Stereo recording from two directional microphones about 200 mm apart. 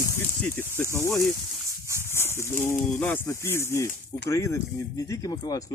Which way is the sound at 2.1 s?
10° left (ahead or behind).